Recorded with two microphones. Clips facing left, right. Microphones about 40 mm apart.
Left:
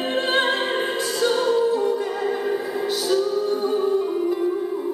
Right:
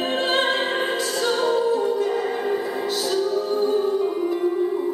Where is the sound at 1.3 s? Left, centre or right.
Centre.